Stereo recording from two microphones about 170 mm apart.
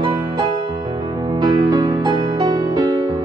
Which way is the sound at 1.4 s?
25° right (ahead or behind).